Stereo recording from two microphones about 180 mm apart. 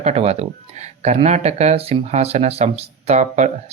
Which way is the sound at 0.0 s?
35° right (ahead or behind).